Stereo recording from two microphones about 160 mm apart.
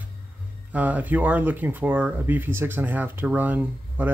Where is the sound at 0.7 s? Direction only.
10° right (ahead or behind).